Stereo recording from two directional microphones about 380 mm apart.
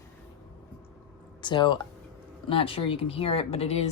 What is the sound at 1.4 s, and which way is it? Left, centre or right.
Speech, centre.